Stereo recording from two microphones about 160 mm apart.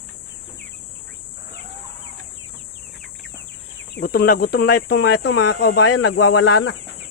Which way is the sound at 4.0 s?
70° left (ahead or behind).